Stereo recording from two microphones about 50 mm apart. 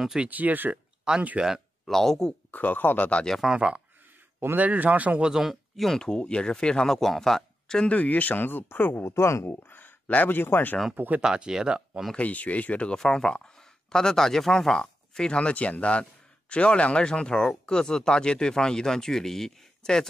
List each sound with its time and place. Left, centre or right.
0.2 s a man's voice: right
1.1 s speech: centre
1.9 s speech: centre
2.5 s speech: left
3.5 s speech: centre
4.6 s a man's voice: right
5.3 s speech: centre
5.9 s speech: centre
7.9 s speech: left
9.0 s speech: left
9.5 s speech: left
11.1 s speech: centre
12.2 s speech: left
12.9 s speech: centre